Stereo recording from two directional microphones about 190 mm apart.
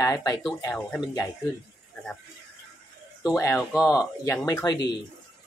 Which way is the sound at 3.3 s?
10° left (ahead or behind).